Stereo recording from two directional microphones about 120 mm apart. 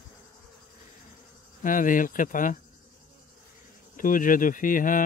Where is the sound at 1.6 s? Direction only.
90° left.